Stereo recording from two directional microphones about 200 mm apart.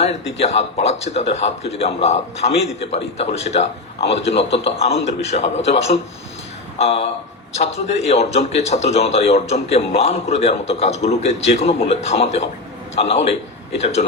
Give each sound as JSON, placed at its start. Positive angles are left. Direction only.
{"t": 0.0, "sound": "a man's voice", "side_deg": 30}